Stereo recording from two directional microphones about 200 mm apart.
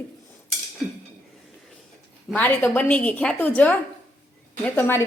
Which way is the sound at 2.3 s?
5° left (ahead or behind).